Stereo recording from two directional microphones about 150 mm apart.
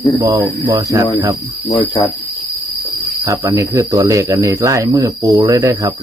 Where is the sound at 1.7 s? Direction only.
30° left (ahead or behind).